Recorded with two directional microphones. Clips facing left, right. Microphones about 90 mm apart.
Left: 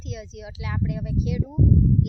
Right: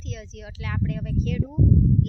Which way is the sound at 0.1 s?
15° left (ahead or behind).